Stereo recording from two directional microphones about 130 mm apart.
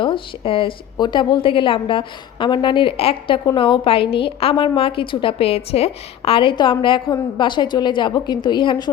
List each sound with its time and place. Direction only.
0.0 s a woman's voice: 40° left (ahead or behind)